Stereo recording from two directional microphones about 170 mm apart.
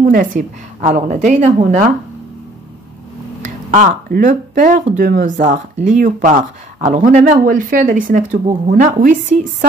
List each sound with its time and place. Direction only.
0.0 s speech: 50° right (ahead or behind)
3.4 s speech: 45° right (ahead or behind)